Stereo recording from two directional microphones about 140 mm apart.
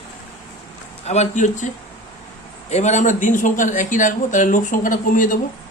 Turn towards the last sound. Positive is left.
turn(degrees=70)  # may be behind; listen again after turning